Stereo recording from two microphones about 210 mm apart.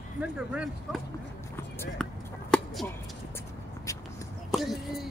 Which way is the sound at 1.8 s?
5° left (ahead or behind).